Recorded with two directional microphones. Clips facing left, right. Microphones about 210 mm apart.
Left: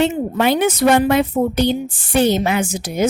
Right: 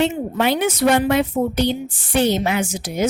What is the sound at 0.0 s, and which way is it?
A woman's voice, 45° left (ahead or behind).